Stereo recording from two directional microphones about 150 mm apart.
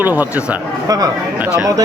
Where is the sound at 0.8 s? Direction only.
25° right (ahead or behind).